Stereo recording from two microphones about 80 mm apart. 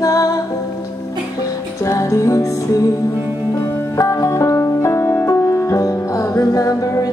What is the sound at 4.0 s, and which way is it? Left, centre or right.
Music, left.